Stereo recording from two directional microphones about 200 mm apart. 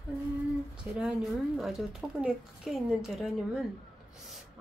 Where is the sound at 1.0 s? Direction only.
5° right (ahead or behind).